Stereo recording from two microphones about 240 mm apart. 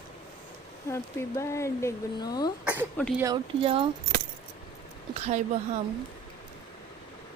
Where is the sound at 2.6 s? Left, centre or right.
Centre.